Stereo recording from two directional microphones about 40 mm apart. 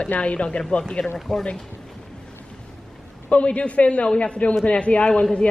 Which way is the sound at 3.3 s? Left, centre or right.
Left.